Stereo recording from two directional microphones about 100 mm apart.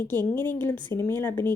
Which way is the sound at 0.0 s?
20° left (ahead or behind).